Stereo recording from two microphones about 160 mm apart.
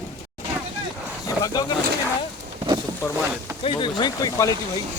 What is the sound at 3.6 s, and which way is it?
Speech, 30° left (ahead or behind).